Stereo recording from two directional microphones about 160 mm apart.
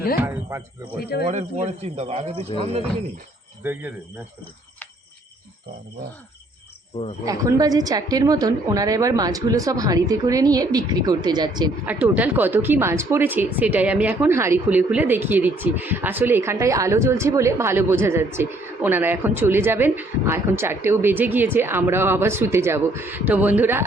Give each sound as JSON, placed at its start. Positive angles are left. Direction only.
{"t": 0.2, "sound": "a sound", "side_deg": -15}
{"t": 1.0, "sound": "speech", "side_deg": 80}
{"t": 1.3, "sound": "speech", "side_deg": -45}
{"t": 3.6, "sound": "speech", "side_deg": -10}
{"t": 7.3, "sound": "a woman's voice", "side_deg": -20}
{"t": 11.9, "sound": "speech", "side_deg": -10}